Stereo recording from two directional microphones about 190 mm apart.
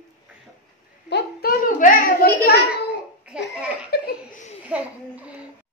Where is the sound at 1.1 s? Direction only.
50° left (ahead or behind).